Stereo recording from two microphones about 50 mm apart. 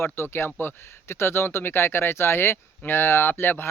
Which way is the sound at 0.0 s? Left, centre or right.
Left.